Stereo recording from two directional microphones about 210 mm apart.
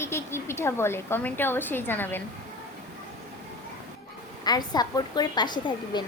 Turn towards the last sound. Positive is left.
turn(degrees=20)  # may be behind; listen again after turning